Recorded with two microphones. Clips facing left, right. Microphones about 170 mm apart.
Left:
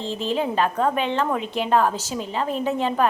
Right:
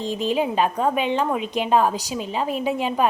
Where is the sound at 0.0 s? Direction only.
15° right (ahead or behind).